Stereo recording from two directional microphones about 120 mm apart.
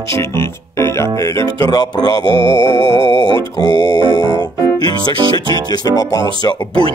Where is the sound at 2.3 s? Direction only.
45° right (ahead or behind).